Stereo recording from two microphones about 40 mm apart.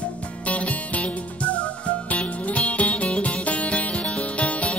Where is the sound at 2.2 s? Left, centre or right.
Left.